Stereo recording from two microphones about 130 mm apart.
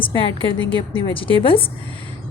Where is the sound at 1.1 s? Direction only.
45° left (ahead or behind).